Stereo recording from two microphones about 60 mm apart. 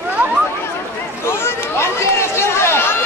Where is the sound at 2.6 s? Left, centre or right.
Left.